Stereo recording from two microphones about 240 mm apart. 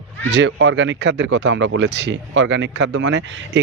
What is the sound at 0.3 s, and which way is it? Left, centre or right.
Speech, right.